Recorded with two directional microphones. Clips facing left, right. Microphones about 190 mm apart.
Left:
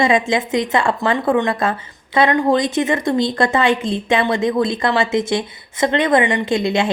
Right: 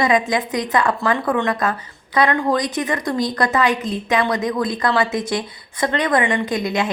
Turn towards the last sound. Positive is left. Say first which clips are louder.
# left 3 dB
turn(degrees=25)  # may be behind; listen again after turning